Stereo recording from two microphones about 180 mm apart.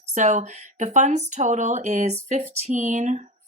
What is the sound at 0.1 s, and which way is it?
Speech, 40° right (ahead or behind).